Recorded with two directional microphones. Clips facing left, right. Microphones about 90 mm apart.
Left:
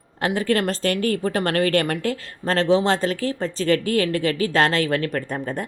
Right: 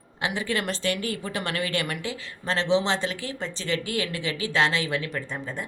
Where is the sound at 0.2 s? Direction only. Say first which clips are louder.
Left 7 dB; 40° left (ahead or behind).